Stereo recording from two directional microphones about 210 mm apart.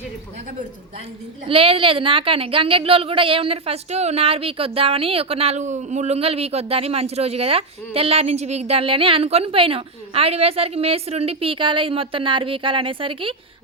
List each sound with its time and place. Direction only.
1.5 s a woman's voice: 25° right (ahead or behind)